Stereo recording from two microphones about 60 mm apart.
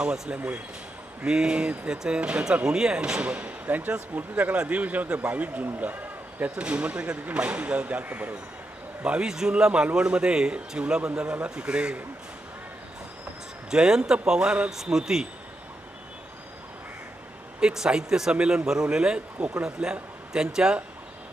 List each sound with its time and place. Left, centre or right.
0.0 s a man's voice: centre
9.0 s a man's voice: centre
13.7 s a man's voice: centre
17.6 s a man's voice: centre